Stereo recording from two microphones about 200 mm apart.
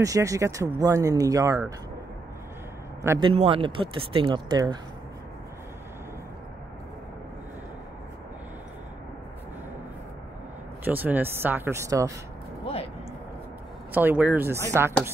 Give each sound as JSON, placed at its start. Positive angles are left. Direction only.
{"t": 0.0, "sound": "speech", "side_deg": -15}
{"t": 3.0, "sound": "a man's voice", "side_deg": -15}
{"t": 3.3, "sound": "speech", "side_deg": -25}
{"t": 10.8, "sound": "speech", "side_deg": -10}
{"t": 13.9, "sound": "speech", "side_deg": -10}